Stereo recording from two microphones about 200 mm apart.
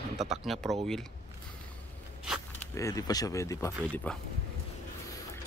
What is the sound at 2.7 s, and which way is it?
Speech, 15° left (ahead or behind).